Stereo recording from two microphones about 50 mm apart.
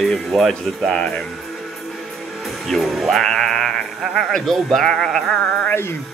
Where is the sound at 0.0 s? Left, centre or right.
Centre.